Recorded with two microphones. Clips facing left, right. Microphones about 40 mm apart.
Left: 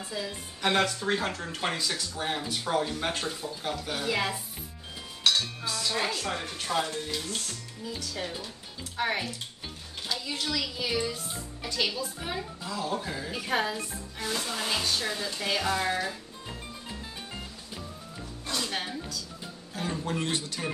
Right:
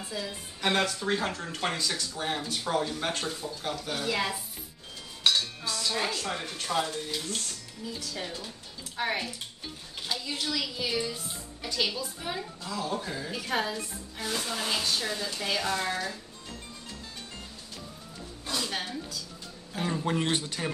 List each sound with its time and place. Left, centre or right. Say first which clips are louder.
0.1 s a woman's voice: left 1 dB; centre
5.4 s speech: even; centre
8.9 s a woman's voice: left 1 dB; centre
18.5 s speech: even; centre
19.7 s speech: right 3 dB; centre